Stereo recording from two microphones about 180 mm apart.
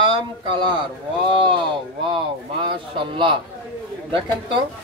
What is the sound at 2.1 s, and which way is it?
A woman's voice, 25° right (ahead or behind).